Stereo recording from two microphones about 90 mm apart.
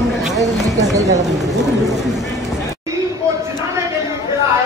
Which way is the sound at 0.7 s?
40° right (ahead or behind).